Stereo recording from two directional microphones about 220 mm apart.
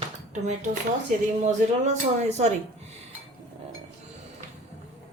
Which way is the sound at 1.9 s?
30° right (ahead or behind).